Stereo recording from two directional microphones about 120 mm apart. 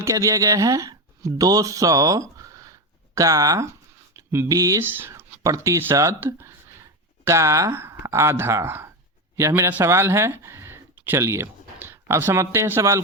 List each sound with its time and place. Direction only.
0.0 s speech: 25° right (ahead or behind)